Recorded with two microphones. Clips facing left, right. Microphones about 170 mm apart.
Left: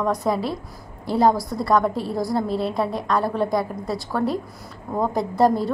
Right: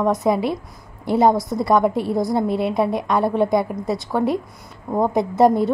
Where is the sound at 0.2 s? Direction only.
10° right (ahead or behind).